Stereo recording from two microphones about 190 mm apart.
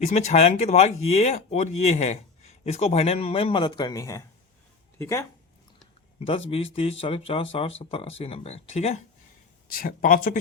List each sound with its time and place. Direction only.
0.0 s speech: 35° left (ahead or behind); by 5.2 s 15° left (ahead or behind)
6.5 s speech: 30° left (ahead or behind)
9.7 s speech: 50° left (ahead or behind)